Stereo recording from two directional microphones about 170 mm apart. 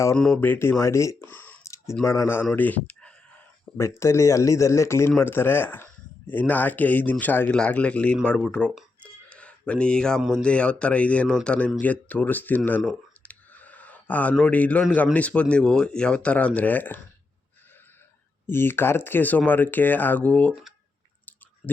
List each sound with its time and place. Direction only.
0.2 s speech: 5° left (ahead or behind)
4.0 s speech: 15° left (ahead or behind)
18.4 s speech: 15° left (ahead or behind)